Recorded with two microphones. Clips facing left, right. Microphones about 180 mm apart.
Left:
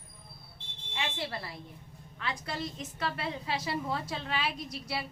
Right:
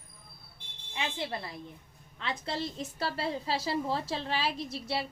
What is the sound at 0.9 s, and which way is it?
A woman's voice, 20° right (ahead or behind).